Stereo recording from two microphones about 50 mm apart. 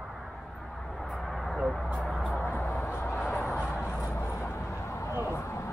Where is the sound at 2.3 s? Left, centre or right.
Left.